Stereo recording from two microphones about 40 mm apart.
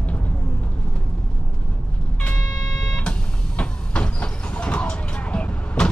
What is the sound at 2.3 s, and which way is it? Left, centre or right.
Vehicle, left.